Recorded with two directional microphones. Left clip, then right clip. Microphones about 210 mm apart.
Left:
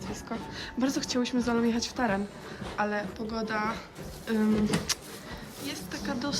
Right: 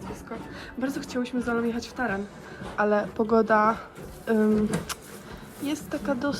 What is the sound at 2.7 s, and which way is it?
Speech, 5° right (ahead or behind).